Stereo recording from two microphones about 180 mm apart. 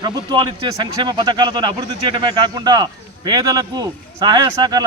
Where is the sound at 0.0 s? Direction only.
25° right (ahead or behind).